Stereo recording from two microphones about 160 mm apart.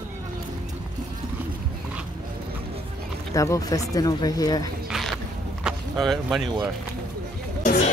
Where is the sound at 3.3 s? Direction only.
20° left (ahead or behind).